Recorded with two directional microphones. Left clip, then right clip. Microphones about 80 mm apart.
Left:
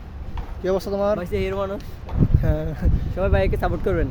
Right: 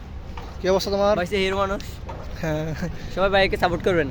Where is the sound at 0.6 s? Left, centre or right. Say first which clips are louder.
Right 2 dB; left.